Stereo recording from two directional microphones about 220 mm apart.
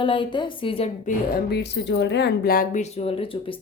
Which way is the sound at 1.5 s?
50° left (ahead or behind).